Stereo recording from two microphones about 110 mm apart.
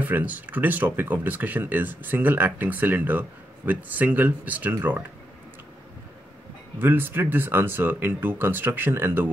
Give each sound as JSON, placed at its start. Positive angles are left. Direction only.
{"t": 0.0, "sound": "speech", "side_deg": -15}
{"t": 6.8, "sound": "speech", "side_deg": -20}